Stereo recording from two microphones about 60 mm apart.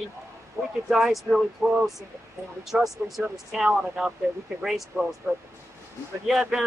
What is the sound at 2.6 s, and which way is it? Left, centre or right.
Speech, centre.